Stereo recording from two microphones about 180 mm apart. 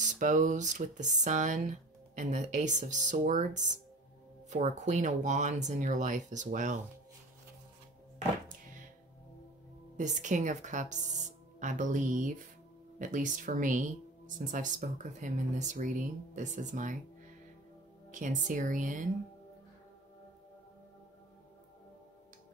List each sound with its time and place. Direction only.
0.0 s speech: 45° right (ahead or behind)
9.9 s speech: 40° right (ahead or behind)
18.1 s speech: 45° right (ahead or behind)